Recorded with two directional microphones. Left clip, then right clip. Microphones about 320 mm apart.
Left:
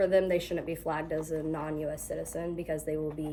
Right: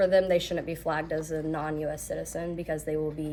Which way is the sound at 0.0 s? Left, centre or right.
Centre.